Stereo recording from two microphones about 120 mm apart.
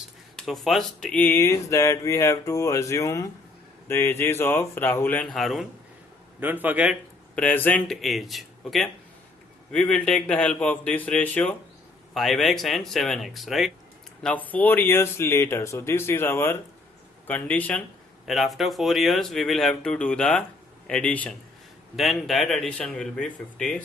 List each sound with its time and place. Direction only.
0.3 s speech: centre (ahead or behind)
5.3 s speech: centre (ahead or behind)
6.4 s speech: 15° right (ahead or behind)
7.3 s speech: 15° left (ahead or behind)
7.9 s speech: centre (ahead or behind)
12.1 s speech: centre (ahead or behind)
14.2 s speech: 10° left (ahead or behind)
18.3 s speech: centre (ahead or behind)
21.9 s speech: centre (ahead or behind)